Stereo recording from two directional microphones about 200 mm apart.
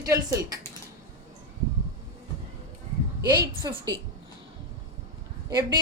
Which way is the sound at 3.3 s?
20° right (ahead or behind).